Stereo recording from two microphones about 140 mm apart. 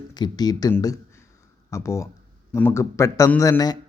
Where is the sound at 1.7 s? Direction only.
20° left (ahead or behind).